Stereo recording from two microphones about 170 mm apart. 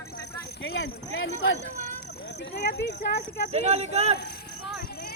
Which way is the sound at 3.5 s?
40° right (ahead or behind).